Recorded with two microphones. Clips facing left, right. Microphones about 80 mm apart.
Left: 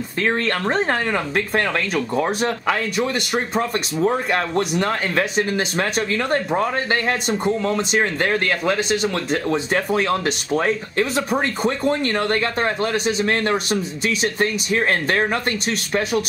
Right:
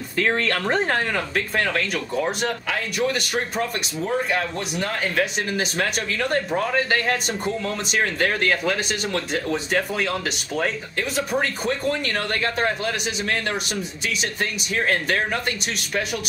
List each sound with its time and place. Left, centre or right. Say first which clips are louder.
0.2 s speech: left 1 dB; centre; by 2.3 s left
2.4 s speech: left 5 dB; left
5.8 s speech: left 4 dB; left
9.3 s speech: left 3 dB; left